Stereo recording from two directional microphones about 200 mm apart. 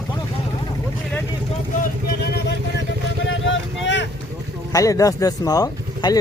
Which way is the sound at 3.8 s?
65° left (ahead or behind).